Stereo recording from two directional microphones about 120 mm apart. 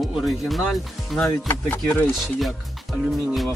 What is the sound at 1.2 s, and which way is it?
Speech, 20° left (ahead or behind).